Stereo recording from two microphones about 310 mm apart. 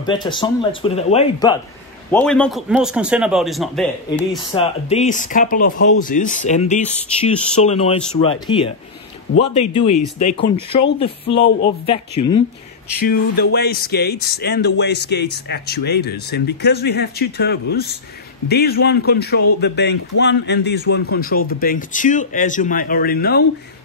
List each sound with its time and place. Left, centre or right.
0.0 s speech: centre
2.0 s a man's voice: centre
4.4 s a man's voice: centre
13.0 s a man's voice: left